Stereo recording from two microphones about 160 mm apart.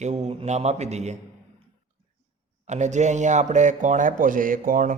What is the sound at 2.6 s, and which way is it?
Speech, 45° right (ahead or behind).